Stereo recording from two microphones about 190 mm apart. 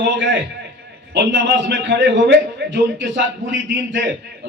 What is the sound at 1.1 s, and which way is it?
Speech, 70° right (ahead or behind).